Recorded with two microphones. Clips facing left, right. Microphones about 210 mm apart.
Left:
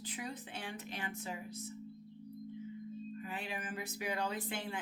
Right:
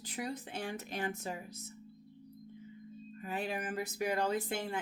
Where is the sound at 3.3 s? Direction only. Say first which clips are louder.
Right 9 dB; 40° right (ahead or behind).